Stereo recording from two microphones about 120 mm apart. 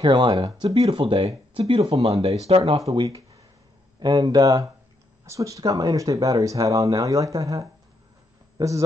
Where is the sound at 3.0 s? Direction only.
30° right (ahead or behind).